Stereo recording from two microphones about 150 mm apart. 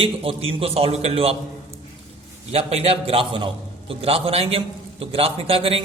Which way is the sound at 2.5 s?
45° right (ahead or behind).